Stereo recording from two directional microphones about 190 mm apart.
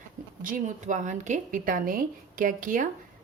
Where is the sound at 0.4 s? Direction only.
45° right (ahead or behind).